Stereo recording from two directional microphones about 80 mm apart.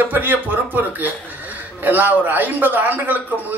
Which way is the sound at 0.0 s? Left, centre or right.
Right.